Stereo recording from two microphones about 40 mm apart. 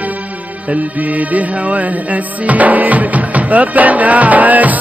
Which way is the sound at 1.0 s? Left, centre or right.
Right.